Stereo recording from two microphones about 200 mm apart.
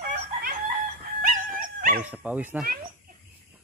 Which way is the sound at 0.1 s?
50° right (ahead or behind).